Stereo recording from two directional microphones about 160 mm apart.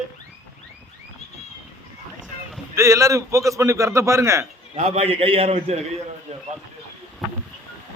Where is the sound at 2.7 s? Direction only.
20° right (ahead or behind).